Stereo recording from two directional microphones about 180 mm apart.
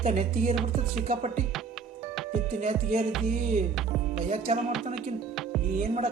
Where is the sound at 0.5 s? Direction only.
Centre (ahead or behind).